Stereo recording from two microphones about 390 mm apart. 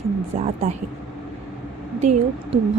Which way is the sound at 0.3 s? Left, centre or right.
Centre.